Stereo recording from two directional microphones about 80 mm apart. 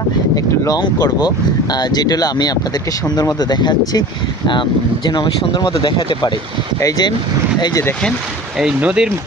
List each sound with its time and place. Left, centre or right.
0.7 s speech: left
8.5 s speech: centre